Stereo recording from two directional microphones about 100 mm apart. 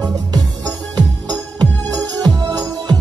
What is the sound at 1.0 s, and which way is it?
Music, 40° right (ahead or behind).